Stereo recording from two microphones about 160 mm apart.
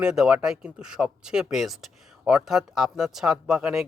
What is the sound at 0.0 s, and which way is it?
Speech, 5° right (ahead or behind).